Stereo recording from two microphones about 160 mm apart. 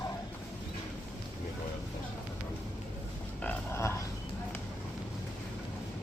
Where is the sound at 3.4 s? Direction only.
15° left (ahead or behind).